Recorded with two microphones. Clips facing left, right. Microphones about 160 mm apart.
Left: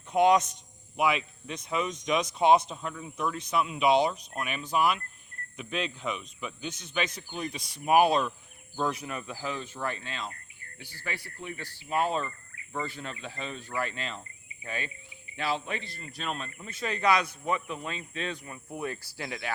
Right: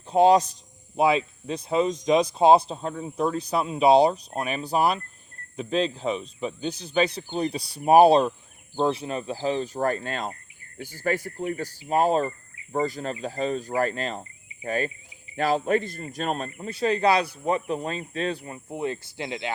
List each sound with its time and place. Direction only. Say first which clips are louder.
0.1 s speech: right 5 dB; 30° right (ahead or behind)